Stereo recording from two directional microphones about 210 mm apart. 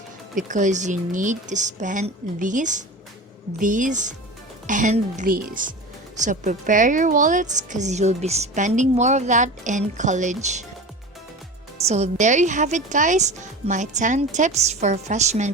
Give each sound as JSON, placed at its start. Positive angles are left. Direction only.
{"t": 0.3, "sound": "a woman's voice", "side_deg": -35}
{"t": 11.9, "sound": "a woman's voice", "side_deg": -30}